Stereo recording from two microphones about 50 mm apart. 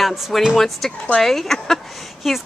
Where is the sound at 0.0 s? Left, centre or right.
Centre.